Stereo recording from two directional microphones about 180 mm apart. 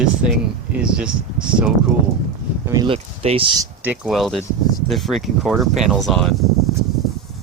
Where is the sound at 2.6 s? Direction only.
20° right (ahead or behind).